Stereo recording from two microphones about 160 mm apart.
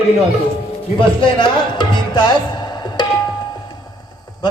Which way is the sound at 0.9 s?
30° left (ahead or behind).